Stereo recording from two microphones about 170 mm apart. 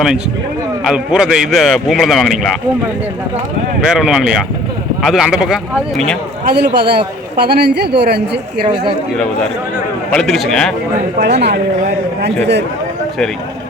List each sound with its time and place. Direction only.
0.9 s a man's voice: 5° right (ahead or behind)
3.8 s a man's voice: 5° right (ahead or behind)
6.4 s a man's voice: 70° right (ahead or behind)
10.1 s a man's voice: centre (ahead or behind)
11.2 s a man's voice: 80° right